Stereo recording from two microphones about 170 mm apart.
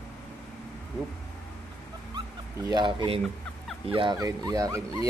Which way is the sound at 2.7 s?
25° right (ahead or behind).